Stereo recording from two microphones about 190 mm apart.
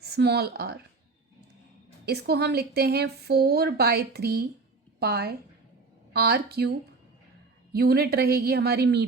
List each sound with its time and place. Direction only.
0.0 s a woman's voice: 60° right (ahead or behind)
2.0 s a woman's voice: 60° right (ahead or behind)